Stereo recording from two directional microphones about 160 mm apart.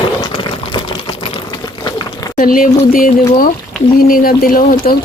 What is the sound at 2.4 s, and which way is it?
Speech, 60° left (ahead or behind).